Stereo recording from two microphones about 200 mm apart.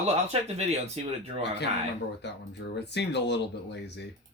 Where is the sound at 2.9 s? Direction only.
60° left (ahead or behind).